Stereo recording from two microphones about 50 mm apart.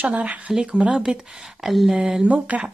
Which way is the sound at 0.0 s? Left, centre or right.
Right.